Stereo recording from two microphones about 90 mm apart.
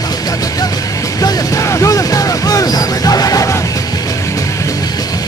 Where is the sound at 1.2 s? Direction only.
40° left (ahead or behind).